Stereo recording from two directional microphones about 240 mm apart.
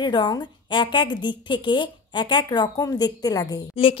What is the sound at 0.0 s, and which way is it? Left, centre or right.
A woman's voice, centre.